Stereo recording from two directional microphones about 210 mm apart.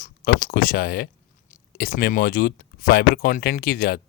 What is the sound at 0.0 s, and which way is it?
Speech, 40° left (ahead or behind).